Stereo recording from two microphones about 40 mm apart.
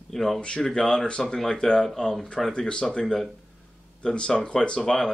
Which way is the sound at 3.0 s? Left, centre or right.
Centre.